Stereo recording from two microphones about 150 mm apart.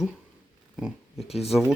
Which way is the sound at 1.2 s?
40° left (ahead or behind).